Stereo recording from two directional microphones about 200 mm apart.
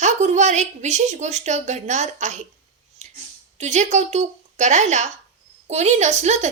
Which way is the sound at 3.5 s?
35° right (ahead or behind).